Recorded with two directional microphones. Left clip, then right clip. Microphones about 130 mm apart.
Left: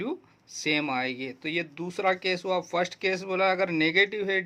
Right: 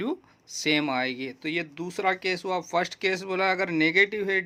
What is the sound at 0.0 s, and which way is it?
Speech, 30° right (ahead or behind).